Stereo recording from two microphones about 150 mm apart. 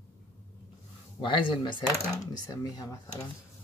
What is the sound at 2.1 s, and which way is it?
Speech, 20° left (ahead or behind).